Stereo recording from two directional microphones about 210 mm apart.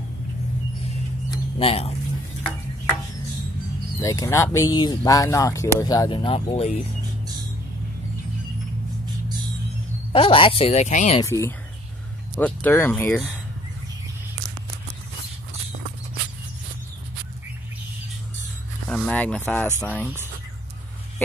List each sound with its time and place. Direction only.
1.3 s a sound: 25° left (ahead or behind)
4.0 s speech: 15° left (ahead or behind)
10.1 s speech: 25° left (ahead or behind)
11.1 s speech: 15° left (ahead or behind)
18.9 s speech: 5° left (ahead or behind)